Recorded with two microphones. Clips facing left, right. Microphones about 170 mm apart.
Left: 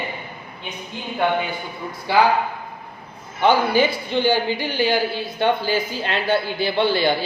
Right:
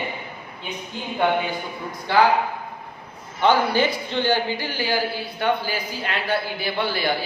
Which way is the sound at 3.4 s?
15° left (ahead or behind).